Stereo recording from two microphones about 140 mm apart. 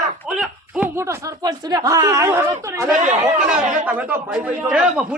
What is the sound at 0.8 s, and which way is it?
A man's voice, 20° right (ahead or behind).